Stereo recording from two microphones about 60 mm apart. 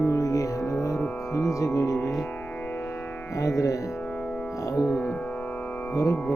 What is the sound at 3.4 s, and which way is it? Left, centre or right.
Music, left.